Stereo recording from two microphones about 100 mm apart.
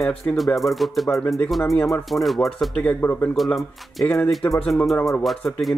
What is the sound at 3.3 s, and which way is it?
Speech, centre (ahead or behind).